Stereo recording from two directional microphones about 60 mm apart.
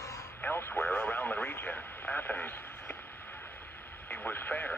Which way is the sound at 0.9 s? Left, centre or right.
Left.